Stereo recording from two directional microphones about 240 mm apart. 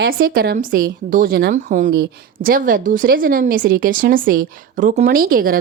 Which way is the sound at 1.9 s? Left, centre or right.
Right.